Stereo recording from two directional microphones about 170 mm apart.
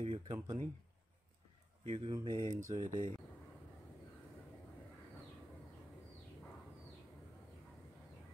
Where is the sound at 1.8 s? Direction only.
35° right (ahead or behind).